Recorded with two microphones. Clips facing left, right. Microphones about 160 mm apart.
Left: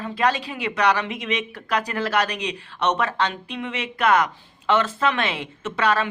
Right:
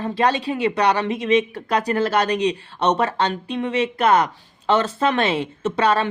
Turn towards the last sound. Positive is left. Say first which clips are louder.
# right 3 dB
turn(degrees=-30)  # may be behind; listen again after turning